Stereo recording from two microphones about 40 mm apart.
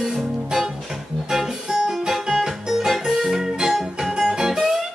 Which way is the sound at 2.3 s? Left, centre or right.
Centre.